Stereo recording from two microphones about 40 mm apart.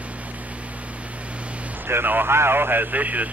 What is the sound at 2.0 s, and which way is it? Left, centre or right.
Speech, right.